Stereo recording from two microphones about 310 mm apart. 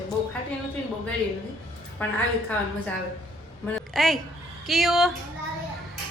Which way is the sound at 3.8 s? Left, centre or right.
Centre.